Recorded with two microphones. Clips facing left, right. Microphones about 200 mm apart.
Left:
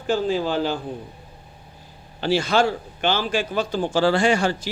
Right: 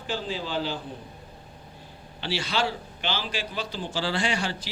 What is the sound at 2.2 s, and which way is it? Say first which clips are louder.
Speech: left 9 dB; 45° left (ahead or behind).